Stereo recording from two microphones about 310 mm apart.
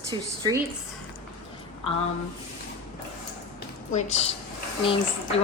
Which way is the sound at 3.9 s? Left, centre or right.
Left.